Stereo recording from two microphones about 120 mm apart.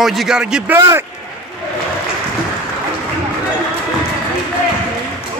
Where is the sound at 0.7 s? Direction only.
20° right (ahead or behind).